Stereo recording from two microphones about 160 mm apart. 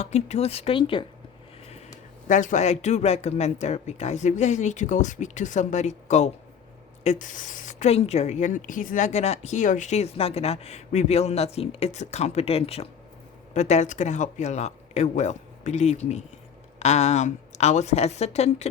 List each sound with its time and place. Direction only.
0.0 s speech: 40° left (ahead or behind)
2.2 s a woman's voice: 50° left (ahead or behind)